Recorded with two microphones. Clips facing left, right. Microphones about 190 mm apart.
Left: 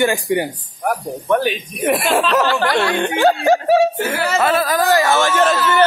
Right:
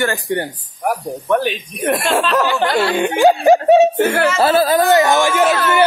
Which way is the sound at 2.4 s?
15° right (ahead or behind).